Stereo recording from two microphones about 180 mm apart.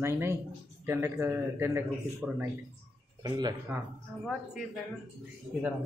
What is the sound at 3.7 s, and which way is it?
Speech, 5° right (ahead or behind).